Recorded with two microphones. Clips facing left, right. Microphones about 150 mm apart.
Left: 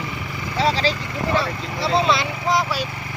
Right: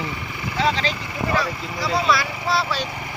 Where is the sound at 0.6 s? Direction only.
35° left (ahead or behind).